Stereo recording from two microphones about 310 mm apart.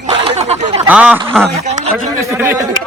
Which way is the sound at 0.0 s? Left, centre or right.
Centre.